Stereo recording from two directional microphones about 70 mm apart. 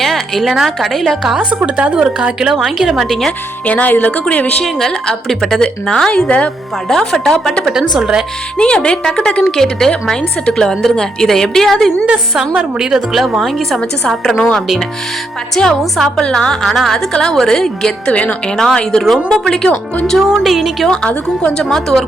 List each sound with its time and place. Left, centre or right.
0.0 s a woman's voice: centre
1.4 s a woman's voice: centre
3.7 s a woman's voice: left
4.6 s a woman's voice: centre
7.7 s a woman's voice: centre
8.5 s a woman's voice: centre
12.3 s a woman's voice: centre
15.5 s a woman's voice: centre
19.6 s a woman's voice: left
20.2 s a woman's voice: centre
21.7 s a woman's voice: centre